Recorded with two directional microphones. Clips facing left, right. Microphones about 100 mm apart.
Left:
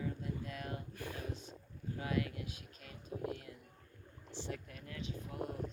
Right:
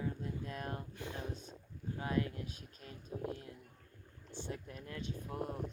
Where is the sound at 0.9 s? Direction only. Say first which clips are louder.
Right 1 dB; 20° right (ahead or behind).